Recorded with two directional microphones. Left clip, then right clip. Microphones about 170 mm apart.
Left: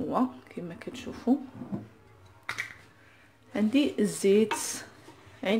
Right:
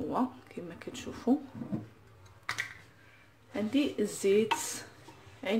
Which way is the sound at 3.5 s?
35° left (ahead or behind).